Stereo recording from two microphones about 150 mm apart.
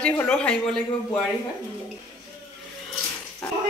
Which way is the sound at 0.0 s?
5° left (ahead or behind).